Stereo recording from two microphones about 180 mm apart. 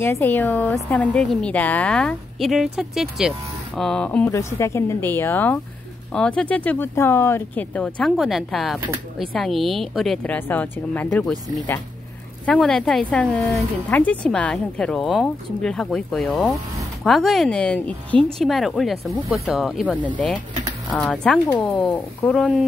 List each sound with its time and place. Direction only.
0.0 s a woman's voice: 10° left (ahead or behind)